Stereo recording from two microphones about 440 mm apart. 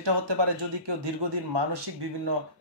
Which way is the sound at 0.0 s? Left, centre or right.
Right.